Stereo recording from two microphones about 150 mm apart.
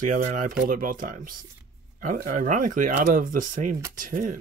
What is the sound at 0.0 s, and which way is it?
Speech, 60° right (ahead or behind).